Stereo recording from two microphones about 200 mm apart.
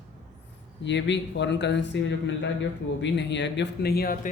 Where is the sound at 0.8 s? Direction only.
60° left (ahead or behind).